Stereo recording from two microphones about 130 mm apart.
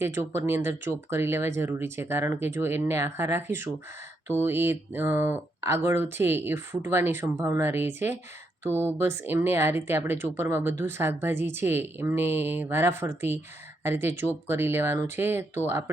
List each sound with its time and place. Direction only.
0.0 s speech: 20° right (ahead or behind)